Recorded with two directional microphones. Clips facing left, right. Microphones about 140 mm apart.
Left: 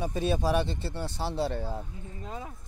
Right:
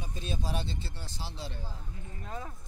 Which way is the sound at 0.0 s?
80° left.